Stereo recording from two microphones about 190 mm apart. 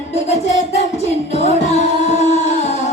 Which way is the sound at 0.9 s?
35° left (ahead or behind).